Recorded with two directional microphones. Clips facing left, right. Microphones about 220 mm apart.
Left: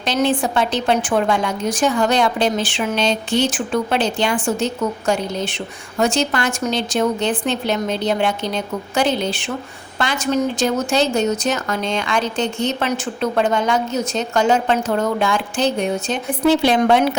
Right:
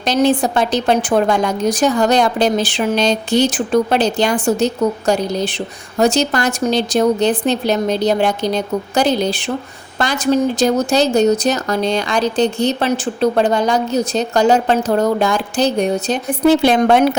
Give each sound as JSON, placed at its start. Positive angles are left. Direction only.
{"t": 0.0, "sound": "a woman's voice", "side_deg": -40}